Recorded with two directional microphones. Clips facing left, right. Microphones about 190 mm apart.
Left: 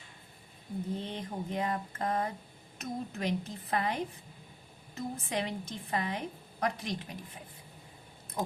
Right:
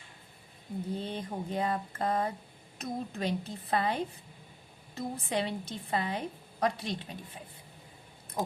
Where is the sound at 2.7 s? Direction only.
30° right (ahead or behind).